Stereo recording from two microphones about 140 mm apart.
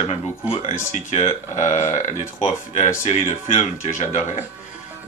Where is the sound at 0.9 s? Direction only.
55° left (ahead or behind).